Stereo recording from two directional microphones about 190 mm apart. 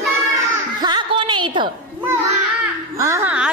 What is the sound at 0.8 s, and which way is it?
Chuckle, 25° right (ahead or behind).